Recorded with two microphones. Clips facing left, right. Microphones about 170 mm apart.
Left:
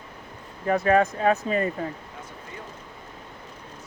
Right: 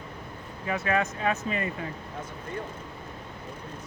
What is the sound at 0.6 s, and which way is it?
Speech, 40° left (ahead or behind).